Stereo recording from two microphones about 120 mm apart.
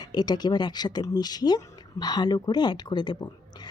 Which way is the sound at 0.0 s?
35° left (ahead or behind).